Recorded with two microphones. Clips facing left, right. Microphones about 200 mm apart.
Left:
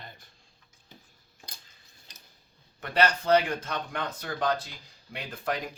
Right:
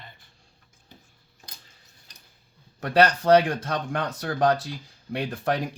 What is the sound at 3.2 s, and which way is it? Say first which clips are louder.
Speech: right 5 dB; 70° right (ahead or behind).